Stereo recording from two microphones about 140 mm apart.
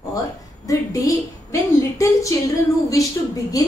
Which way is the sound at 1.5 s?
20° left (ahead or behind).